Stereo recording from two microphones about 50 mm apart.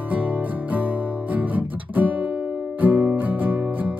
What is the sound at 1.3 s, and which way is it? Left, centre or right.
Guitar, right.